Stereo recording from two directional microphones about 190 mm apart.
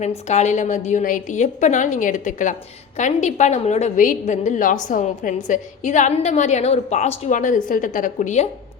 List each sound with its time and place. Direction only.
0.3 s a woman's voice: 35° left (ahead or behind)